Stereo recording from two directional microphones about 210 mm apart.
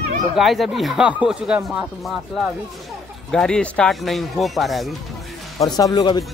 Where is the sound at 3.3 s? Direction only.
5° left (ahead or behind).